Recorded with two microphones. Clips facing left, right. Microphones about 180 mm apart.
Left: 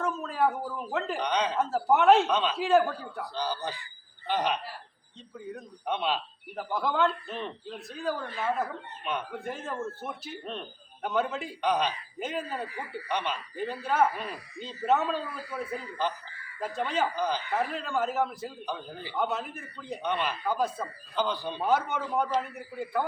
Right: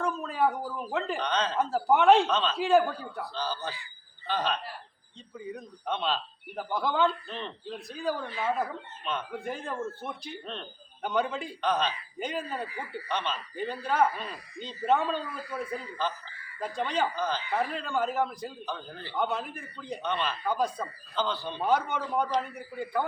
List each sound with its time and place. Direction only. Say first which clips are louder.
0.0 s speech: even; centre (ahead or behind)
1.2 s speech: left 4 dB; 15° left (ahead or behind)
1.5 s a man's voice: right 1 dB; centre (ahead or behind)
3.3 s speech: left 3 dB; 15° left (ahead or behind)
5.4 s a man's voice: right 1 dB; centre (ahead or behind)
5.8 s speech: left 1 dB; 10° left (ahead or behind)
6.6 s a man's voice: even; centre (ahead or behind)
9.0 s speech: left 1 dB; 10° left (ahead or behind)
9.4 s a man's voice: even; centre (ahead or behind)
12.2 s a man's voice: even; centre (ahead or behind)